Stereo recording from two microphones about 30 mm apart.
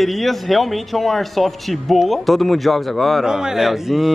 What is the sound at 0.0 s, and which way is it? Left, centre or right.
A man's voice, centre.